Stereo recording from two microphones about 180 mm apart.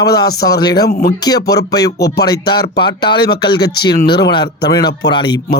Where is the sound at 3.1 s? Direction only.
65° left (ahead or behind).